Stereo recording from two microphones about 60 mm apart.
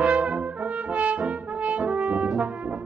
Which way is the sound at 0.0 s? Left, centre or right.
Centre.